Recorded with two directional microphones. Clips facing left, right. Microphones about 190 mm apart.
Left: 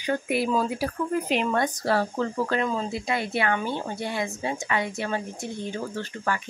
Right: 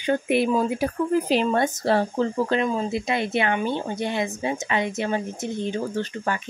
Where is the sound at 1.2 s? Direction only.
30° right (ahead or behind).